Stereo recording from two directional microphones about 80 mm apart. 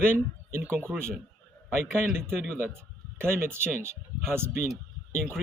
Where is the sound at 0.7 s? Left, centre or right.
Right.